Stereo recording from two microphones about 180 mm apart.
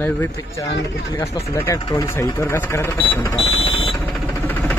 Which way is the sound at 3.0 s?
30° left (ahead or behind).